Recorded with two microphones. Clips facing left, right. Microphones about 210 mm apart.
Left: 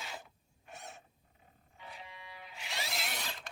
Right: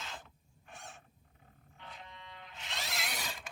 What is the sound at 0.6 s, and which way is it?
Wild animals, 20° left (ahead or behind).